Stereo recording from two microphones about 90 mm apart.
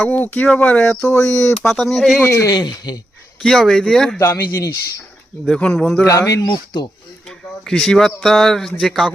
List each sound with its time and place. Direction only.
0.0 s speech: 20° left (ahead or behind); by 2.1 s centre (ahead or behind)
2.1 s speech: 25° left (ahead or behind)
2.5 s speech: 50° left (ahead or behind)
3.4 s speech: 5° left (ahead or behind)
4.2 s speech: 30° left (ahead or behind)
5.5 s speech: 10° left (ahead or behind)
6.1 s speech: 35° left (ahead or behind)
6.4 s speech: 50° left (ahead or behind)
7.3 s speech: 5° left (ahead or behind)